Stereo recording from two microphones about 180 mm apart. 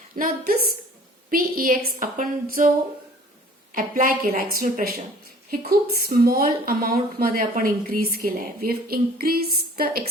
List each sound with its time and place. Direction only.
0.1 s a woman's voice: 50° right (ahead or behind)
3.8 s a woman's voice: 50° right (ahead or behind)